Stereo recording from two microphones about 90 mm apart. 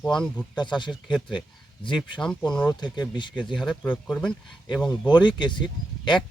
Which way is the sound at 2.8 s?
55° left (ahead or behind).